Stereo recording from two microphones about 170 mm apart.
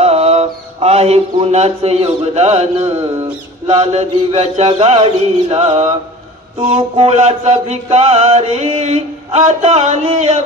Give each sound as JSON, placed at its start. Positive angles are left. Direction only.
{"t": 0.0, "sound": "speech", "side_deg": -40}
{"t": 3.6, "sound": "music", "side_deg": -40}